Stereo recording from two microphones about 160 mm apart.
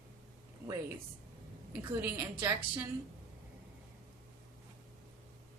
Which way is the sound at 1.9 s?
15° right (ahead or behind).